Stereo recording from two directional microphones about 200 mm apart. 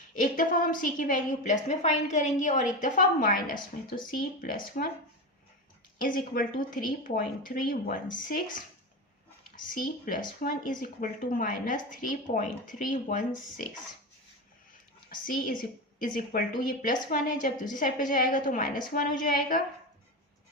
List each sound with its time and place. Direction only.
0.2 s speech: 45° left (ahead or behind)
6.0 s speech: 45° left (ahead or behind)
9.7 s speech: 45° left (ahead or behind)
15.1 s speech: 45° left (ahead or behind)